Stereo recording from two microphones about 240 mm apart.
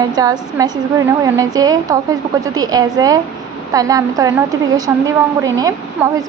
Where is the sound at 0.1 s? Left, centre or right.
Centre.